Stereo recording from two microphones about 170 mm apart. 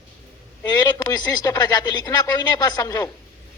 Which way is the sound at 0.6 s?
20° left (ahead or behind).